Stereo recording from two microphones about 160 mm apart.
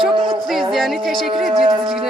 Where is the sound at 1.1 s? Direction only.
35° right (ahead or behind).